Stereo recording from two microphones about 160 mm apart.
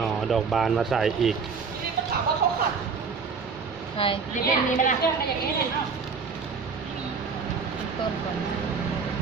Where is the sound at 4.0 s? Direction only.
35° left (ahead or behind).